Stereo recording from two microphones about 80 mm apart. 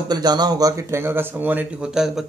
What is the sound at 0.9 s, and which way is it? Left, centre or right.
Speech, right.